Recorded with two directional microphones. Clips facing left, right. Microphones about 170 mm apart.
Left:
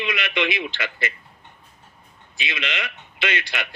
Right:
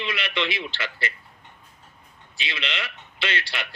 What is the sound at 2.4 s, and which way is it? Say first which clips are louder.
Speech: left 3 dB; 50° left (ahead or behind).